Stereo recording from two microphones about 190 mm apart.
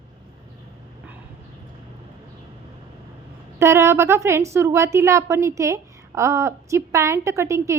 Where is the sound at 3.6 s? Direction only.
15° right (ahead or behind).